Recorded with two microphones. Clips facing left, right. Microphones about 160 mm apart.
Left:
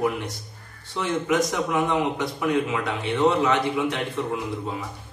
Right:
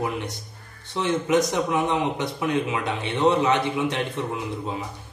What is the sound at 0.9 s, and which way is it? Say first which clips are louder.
A man's voice: right 2 dB; 20° right (ahead or behind).